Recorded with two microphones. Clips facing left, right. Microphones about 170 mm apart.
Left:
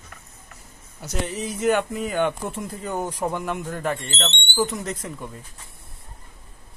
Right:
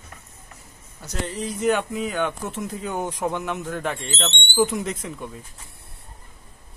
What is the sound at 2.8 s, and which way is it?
Speech, 10° right (ahead or behind).